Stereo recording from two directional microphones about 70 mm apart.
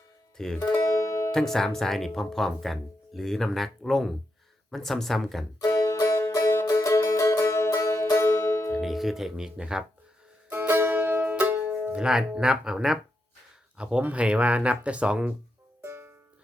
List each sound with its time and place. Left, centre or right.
0.3 s speech: centre
0.6 s music: left
1.3 s speech: centre
5.5 s music: left
8.7 s speech: centre
10.5 s music: right
11.9 s speech: centre
15.8 s music: right